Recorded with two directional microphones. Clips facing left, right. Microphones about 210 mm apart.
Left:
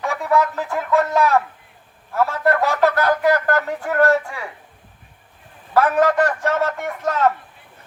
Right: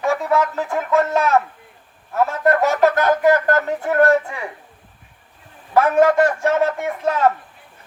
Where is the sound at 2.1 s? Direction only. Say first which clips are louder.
Right 1 dB; 20° right (ahead or behind).